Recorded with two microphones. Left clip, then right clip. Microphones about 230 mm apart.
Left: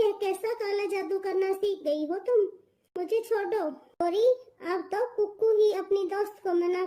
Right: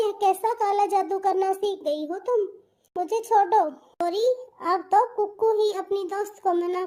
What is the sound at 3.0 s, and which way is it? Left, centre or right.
Speech, centre.